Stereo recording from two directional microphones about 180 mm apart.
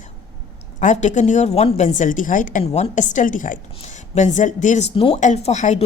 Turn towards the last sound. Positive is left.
turn(degrees=40)  # may be behind; listen again after turning